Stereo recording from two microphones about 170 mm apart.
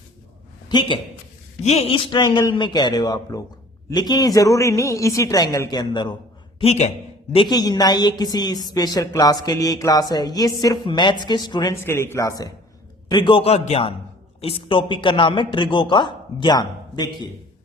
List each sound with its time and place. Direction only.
0.7 s a man's voice: 25° left (ahead or behind)
1.6 s a woman's voice: 40° left (ahead or behind)
6.6 s a man's voice: 40° left (ahead or behind)
7.3 s a woman's voice: 25° left (ahead or behind)